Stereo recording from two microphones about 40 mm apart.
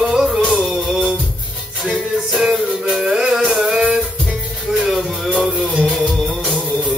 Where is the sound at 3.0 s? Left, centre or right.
Centre.